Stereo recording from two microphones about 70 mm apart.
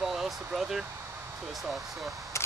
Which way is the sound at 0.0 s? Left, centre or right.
Centre.